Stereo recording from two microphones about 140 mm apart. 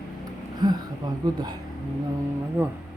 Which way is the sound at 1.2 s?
30° right (ahead or behind).